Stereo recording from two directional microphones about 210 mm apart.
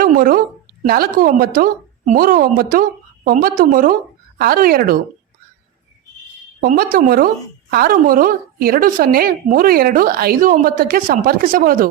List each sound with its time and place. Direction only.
0.0 s a sound: 40° right (ahead or behind)
0.9 s a woman's voice: 45° right (ahead or behind)
6.6 s a woman's voice: 45° right (ahead or behind)